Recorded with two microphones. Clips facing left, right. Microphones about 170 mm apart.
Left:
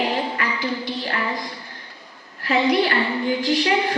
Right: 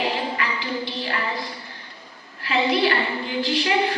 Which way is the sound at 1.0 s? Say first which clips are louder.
Left 1 dB; 45° left (ahead or behind).